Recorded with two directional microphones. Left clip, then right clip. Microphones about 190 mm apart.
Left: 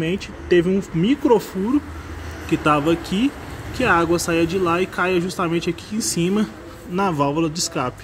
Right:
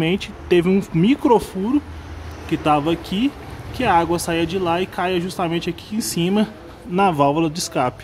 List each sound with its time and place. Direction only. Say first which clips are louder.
0.0 s speech: right 3 dB; 20° right (ahead or behind)